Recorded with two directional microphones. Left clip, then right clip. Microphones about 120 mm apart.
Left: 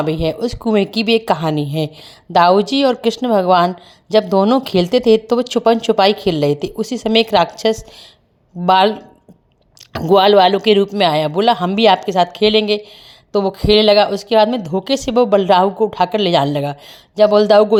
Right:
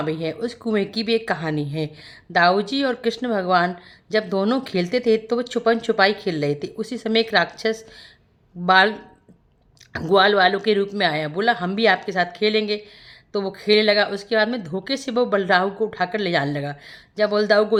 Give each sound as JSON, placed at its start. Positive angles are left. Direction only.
{"t": 0.0, "sound": "speech", "side_deg": 45}
{"t": 10.2, "sound": "speech", "side_deg": 45}